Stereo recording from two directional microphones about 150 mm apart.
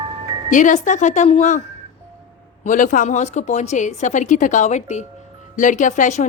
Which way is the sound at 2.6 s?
60° left (ahead or behind).